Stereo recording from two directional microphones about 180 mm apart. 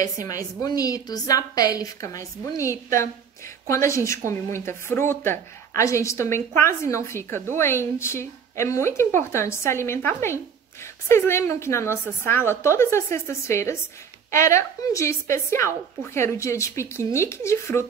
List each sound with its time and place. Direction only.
0.0 s a woman's voice: 20° left (ahead or behind)